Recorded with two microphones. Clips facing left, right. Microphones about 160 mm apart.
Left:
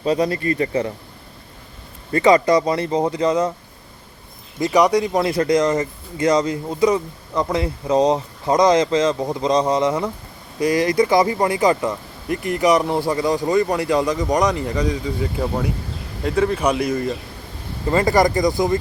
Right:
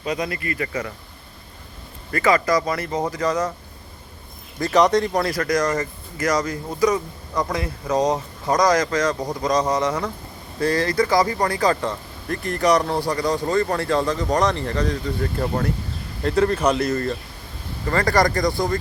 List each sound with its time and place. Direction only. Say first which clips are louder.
0.0 s speech: left 7 dB; 30° left (ahead or behind)
2.1 s speech: left 5 dB; 30° left (ahead or behind)
4.6 s speech: left 1 dB; 15° left (ahead or behind)
5.3 s speech: left 4 dB; 30° left (ahead or behind)